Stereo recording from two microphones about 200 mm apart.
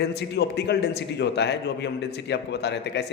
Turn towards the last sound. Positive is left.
turn(degrees=60)  # may be behind; listen again after turning